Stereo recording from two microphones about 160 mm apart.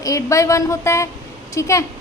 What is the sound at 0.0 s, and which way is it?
A woman's voice, 20° left (ahead or behind).